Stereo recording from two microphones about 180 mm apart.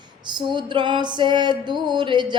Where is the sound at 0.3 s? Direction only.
25° right (ahead or behind).